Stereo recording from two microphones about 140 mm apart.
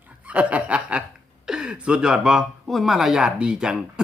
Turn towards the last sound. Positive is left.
turn(degrees=-5)  # may be behind; listen again after turning